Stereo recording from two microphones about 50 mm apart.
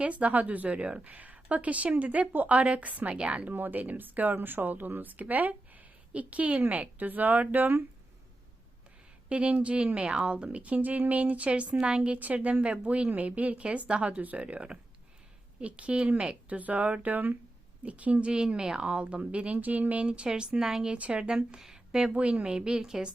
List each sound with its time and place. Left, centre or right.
0.0 s a woman's voice: right
3.5 s a woman's voice: right
9.3 s a woman's voice: right
22.1 s a woman's voice: right